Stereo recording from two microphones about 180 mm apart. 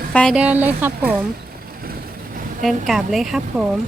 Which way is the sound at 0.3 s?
10° right (ahead or behind).